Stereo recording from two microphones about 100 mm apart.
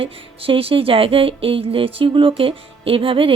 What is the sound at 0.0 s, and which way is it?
Speech, 70° right (ahead or behind).